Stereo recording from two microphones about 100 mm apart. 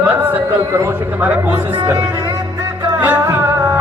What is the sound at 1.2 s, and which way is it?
Speech, 15° right (ahead or behind).